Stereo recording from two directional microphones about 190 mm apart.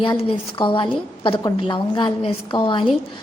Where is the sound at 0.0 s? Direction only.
30° left (ahead or behind).